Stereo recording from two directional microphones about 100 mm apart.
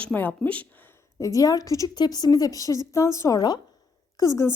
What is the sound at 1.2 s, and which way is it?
A woman's voice, 35° left (ahead or behind).